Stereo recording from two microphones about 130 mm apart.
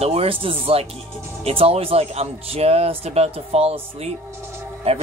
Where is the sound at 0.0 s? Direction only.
50° right (ahead or behind).